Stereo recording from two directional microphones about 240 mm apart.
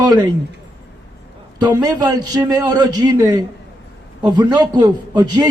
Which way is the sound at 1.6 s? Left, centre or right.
Centre.